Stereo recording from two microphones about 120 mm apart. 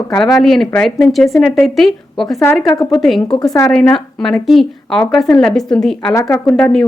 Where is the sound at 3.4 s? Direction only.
30° left (ahead or behind).